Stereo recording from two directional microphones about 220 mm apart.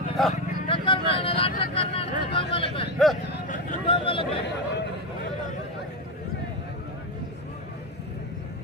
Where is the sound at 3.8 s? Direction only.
25° left (ahead or behind).